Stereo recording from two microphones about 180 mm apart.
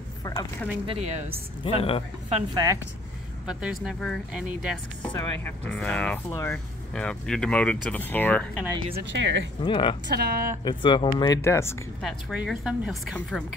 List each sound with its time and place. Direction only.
0.2 s a sound: 20° left (ahead or behind)
0.8 s a woman's voice: 35° right (ahead or behind)
1.6 s speech: 30° left (ahead or behind)
2.5 s speech: 20° right (ahead or behind)
3.4 s speech: 5° right (ahead or behind)
5.1 s speech: 10° left (ahead or behind)
8.9 s speech: 85° right
9.6 s speech: 30° left (ahead or behind)
10.0 s speech: 60° right (ahead or behind)
10.6 s speech: 25° left (ahead or behind)
12.0 s speech: centre (ahead or behind)